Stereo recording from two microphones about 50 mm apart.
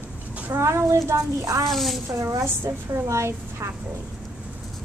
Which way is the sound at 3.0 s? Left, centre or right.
Right.